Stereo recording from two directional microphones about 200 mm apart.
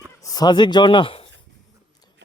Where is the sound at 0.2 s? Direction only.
20° left (ahead or behind).